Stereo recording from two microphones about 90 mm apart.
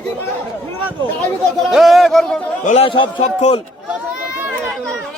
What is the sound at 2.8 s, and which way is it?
Speech, 70° left (ahead or behind).